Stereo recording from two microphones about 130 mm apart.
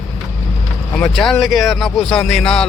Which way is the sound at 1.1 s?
5° left (ahead or behind).